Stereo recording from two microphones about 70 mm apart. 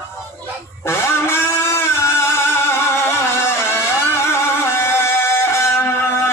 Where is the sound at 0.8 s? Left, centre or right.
Left.